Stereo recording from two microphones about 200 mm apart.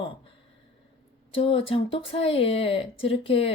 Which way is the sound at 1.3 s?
25° left (ahead or behind).